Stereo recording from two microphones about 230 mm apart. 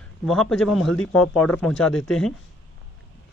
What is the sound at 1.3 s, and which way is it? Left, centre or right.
Speech, centre.